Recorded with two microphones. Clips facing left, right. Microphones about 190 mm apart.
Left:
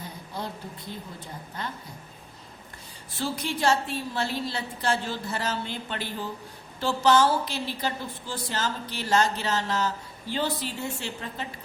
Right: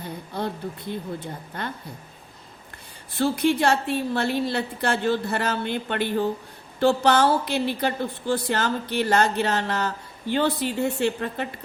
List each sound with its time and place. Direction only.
0.3 s a woman's voice: 60° right (ahead or behind)
3.2 s a woman's voice: 60° right (ahead or behind)